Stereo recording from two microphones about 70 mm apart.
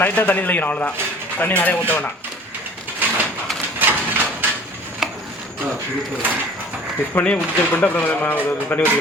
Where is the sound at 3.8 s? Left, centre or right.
Right.